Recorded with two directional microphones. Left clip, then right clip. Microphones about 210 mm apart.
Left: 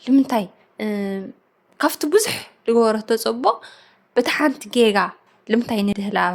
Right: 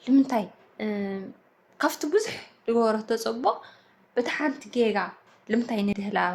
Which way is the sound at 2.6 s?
35° left (ahead or behind).